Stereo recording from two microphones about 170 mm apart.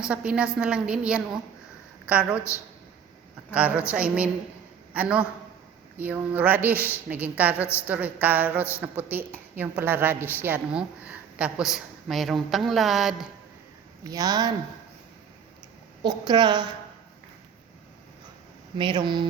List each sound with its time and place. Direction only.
0.0 s a woman's voice: 5° right (ahead or behind)
3.5 s a woman's voice: 5° right (ahead or behind)
14.0 s a woman's voice: 20° right (ahead or behind)
16.0 s a woman's voice: 25° right (ahead or behind)
18.8 s a woman's voice: 25° right (ahead or behind)